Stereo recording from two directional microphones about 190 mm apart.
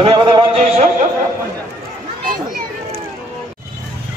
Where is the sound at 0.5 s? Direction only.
35° right (ahead or behind).